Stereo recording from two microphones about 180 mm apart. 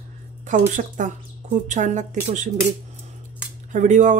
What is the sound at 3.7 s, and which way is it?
Speech, 45° right (ahead or behind).